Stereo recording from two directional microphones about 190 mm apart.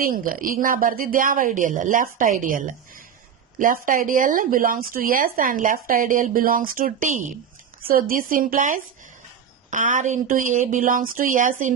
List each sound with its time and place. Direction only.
0.0 s speech: 45° right (ahead or behind)